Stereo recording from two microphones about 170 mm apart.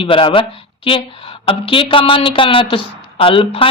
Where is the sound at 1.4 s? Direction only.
30° left (ahead or behind).